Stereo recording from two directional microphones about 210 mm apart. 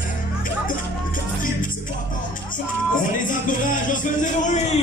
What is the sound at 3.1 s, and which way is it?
Speech, 40° left (ahead or behind).